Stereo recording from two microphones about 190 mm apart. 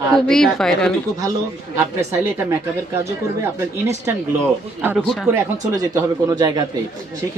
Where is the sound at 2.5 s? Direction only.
15° right (ahead or behind).